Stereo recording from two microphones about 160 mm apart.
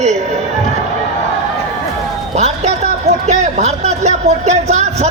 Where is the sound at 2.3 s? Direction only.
45° right (ahead or behind).